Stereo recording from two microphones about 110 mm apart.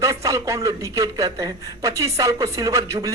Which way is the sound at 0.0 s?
30° right (ahead or behind).